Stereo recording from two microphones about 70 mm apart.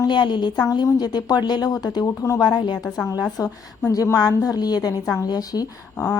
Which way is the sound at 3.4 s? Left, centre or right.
Left.